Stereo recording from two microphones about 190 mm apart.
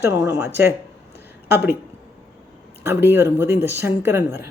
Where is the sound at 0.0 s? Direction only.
15° right (ahead or behind).